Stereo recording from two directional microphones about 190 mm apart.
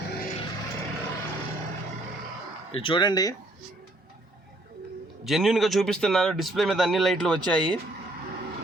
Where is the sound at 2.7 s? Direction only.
25° left (ahead or behind).